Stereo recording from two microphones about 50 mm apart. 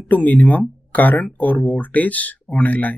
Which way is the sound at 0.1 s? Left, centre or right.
Left.